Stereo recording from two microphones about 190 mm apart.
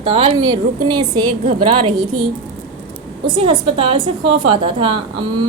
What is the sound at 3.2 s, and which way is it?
A woman's voice, 25° right (ahead or behind).